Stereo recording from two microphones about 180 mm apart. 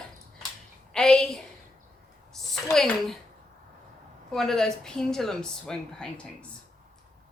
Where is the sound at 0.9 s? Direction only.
5° left (ahead or behind).